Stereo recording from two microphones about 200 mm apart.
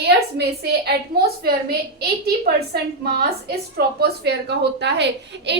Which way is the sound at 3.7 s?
55° right (ahead or behind).